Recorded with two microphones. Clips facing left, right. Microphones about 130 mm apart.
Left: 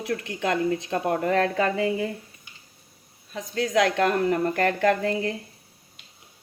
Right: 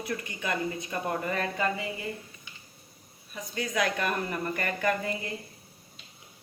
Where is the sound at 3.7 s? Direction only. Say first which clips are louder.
Left 8 dB; 80° left.